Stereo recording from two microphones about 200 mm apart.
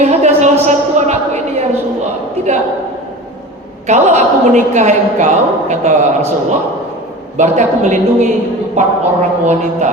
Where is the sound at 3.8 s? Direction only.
35° right (ahead or behind).